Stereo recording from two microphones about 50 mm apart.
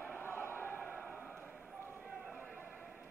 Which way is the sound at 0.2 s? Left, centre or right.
Left.